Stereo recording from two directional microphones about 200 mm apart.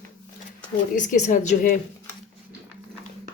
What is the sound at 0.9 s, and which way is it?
Speech, 40° left (ahead or behind).